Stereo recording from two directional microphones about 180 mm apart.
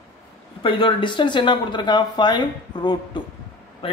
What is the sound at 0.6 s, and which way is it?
Speech, 30° left (ahead or behind).